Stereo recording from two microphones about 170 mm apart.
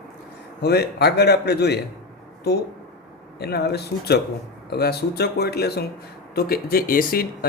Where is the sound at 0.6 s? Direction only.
70° left (ahead or behind).